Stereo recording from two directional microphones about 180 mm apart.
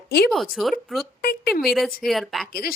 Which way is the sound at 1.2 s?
60° left (ahead or behind).